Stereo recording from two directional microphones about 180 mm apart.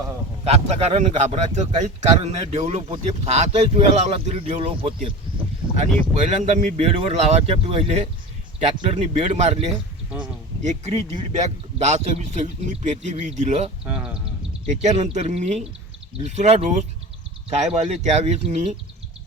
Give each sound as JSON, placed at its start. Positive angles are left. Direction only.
{"t": 0.4, "sound": "a man's voice", "side_deg": -35}
{"t": 6.1, "sound": "a man's voice", "side_deg": -40}
{"t": 13.8, "sound": "speech", "side_deg": -5}
{"t": 14.8, "sound": "a man's voice", "side_deg": -40}